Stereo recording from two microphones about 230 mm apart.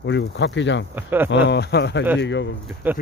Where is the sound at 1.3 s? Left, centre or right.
Left.